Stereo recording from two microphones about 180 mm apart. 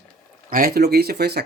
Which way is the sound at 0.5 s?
55° right (ahead or behind).